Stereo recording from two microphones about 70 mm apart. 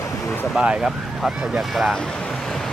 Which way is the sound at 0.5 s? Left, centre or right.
Centre.